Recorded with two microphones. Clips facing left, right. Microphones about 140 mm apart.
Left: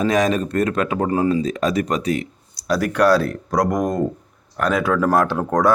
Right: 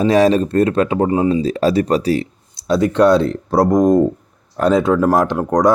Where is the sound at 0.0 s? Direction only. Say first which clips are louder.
Right 5 dB; 30° right (ahead or behind).